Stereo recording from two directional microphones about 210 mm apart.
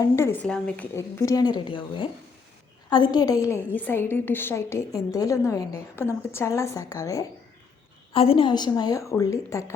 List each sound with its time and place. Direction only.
0.0 s a woman's voice: 10° left (ahead or behind)
8.1 s a woman's voice: 25° left (ahead or behind)